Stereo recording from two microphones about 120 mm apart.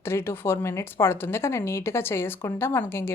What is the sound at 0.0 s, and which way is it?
Speech, 20° left (ahead or behind).